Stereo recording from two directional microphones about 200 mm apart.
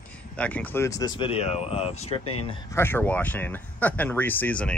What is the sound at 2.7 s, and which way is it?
Speech, 10° left (ahead or behind).